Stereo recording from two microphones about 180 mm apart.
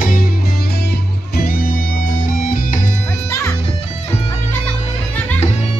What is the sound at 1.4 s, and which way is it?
Music, 55° left (ahead or behind).